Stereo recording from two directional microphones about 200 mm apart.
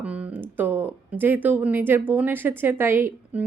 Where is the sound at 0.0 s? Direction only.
5° right (ahead or behind).